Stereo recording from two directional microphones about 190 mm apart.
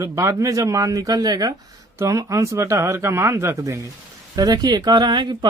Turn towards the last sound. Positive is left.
turn(degrees=-25)  # may be behind; listen again after turning